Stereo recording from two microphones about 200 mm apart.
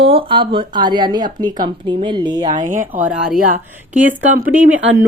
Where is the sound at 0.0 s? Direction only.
25° right (ahead or behind).